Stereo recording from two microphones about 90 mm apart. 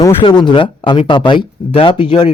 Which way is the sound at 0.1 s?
75° left (ahead or behind).